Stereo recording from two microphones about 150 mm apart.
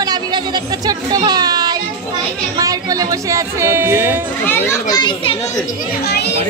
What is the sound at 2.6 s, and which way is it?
Speech, 25° right (ahead or behind).